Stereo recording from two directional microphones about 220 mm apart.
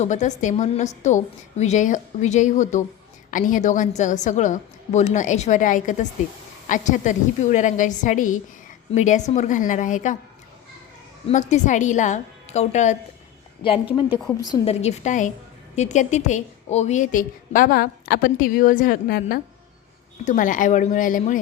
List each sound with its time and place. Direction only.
0.0 s a woman's voice: 35° left (ahead or behind)
11.3 s a woman's voice: 30° left (ahead or behind)